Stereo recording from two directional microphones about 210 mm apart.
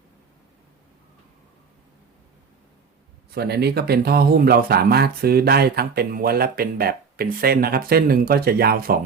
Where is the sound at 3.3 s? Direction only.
50° right (ahead or behind).